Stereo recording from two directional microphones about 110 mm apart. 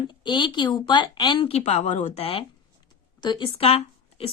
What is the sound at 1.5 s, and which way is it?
Speech, 80° left.